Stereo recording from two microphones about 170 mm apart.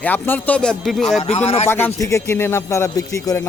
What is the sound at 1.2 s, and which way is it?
Speech, 40° left (ahead or behind).